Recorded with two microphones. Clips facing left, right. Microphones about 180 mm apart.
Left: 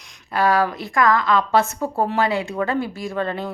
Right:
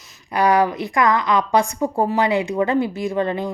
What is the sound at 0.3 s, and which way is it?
Speech, 20° right (ahead or behind).